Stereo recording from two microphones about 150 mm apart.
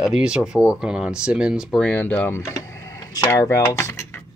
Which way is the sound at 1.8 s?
10° left (ahead or behind).